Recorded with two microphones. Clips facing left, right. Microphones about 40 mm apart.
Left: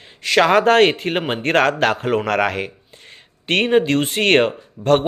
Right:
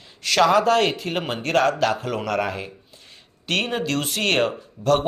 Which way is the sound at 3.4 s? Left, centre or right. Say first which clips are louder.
Left 8 dB; left.